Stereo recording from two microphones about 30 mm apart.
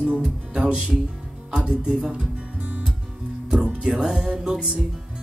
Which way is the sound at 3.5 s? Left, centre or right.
Right.